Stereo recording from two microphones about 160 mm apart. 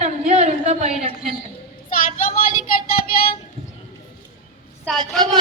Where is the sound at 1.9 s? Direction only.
60° left (ahead or behind).